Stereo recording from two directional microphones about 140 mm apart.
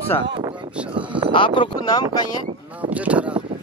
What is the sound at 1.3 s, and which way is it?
Speech, 35° left (ahead or behind).